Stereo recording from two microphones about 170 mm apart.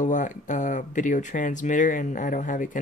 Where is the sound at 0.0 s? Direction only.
50° left (ahead or behind).